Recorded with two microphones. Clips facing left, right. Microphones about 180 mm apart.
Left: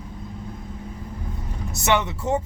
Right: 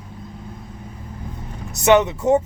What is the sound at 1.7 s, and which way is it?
Speech, 20° right (ahead or behind).